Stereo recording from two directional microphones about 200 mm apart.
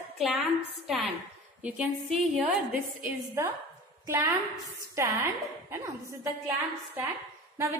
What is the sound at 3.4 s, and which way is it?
Speech, 15° right (ahead or behind).